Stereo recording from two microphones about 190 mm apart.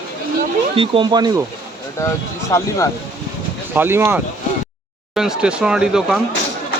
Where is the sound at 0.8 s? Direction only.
25° right (ahead or behind).